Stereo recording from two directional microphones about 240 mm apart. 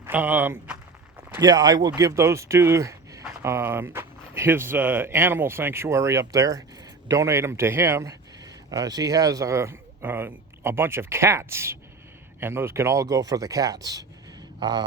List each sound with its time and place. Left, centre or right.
0.0 s speech: centre